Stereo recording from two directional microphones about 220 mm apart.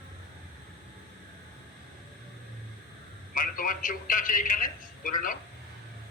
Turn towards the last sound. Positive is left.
turn(degrees=40)  # may be behind; listen again after turning